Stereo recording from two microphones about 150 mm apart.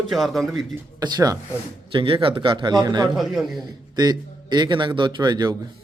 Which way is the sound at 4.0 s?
25° right (ahead or behind).